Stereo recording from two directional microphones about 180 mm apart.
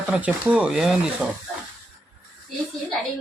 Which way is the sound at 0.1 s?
5° right (ahead or behind).